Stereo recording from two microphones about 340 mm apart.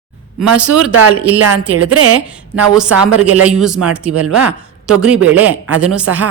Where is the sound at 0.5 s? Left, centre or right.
Right.